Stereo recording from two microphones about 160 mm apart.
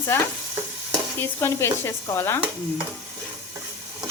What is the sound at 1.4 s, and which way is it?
Speech, 15° left (ahead or behind).